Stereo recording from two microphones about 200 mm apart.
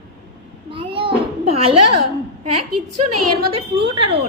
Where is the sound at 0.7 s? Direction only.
25° right (ahead or behind).